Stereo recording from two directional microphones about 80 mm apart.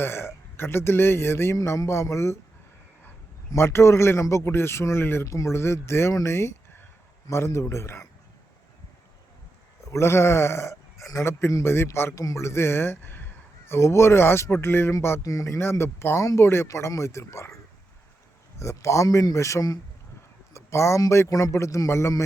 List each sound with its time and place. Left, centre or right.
0.0 s speech: left
1.5 s speech: left
3.5 s speech: left
9.8 s speech: left
12.1 s a man's voice: left
15.2 s speech: left
18.6 s speech: left
20.5 s a sound: left
21.1 s speech: left